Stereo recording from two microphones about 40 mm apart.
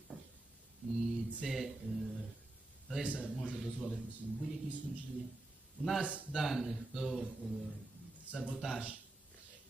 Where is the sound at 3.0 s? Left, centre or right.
Right.